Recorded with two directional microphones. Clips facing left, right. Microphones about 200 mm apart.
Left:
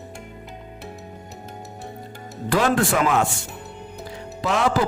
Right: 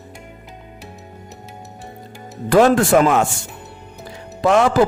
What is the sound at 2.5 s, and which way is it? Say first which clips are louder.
Speech: right 7 dB; 45° right (ahead or behind).